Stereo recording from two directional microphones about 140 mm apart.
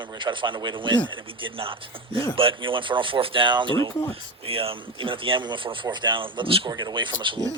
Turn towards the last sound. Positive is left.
turn(degrees=-35)  # may be behind; listen again after turning